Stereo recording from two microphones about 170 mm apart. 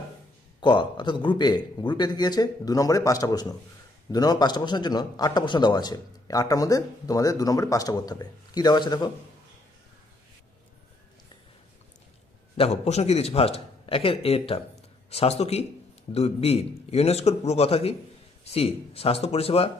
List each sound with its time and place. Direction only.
0.6 s a man's voice: 30° left (ahead or behind)
12.5 s a man's voice: 40° left (ahead or behind)